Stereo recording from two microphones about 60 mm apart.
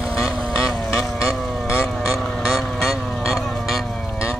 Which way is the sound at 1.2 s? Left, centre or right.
Left.